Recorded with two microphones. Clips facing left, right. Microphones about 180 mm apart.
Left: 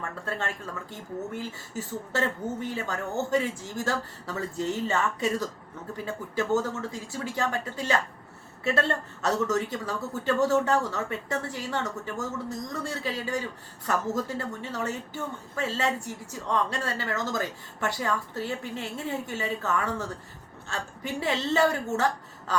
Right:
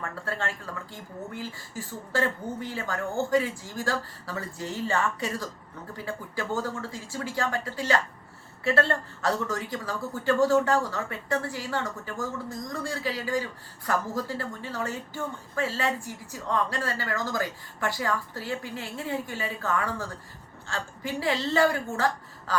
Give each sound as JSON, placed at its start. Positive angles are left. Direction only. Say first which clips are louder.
{"t": 0.3, "sound": "speech", "louder": "even", "side_deg": 20}